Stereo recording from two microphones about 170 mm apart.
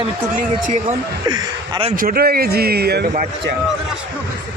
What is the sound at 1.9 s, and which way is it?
A man's voice, 60° right (ahead or behind).